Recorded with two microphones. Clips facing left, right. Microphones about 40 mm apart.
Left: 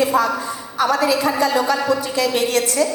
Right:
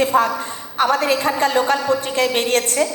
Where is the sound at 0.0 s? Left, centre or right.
Right.